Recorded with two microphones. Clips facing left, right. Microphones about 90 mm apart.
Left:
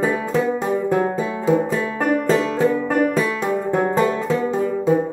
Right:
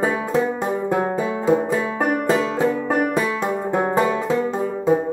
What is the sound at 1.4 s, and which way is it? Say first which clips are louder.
Music: left 1 dB; 15° right (ahead or behind).